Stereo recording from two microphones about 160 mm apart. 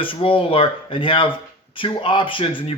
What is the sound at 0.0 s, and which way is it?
Speech, 35° left (ahead or behind).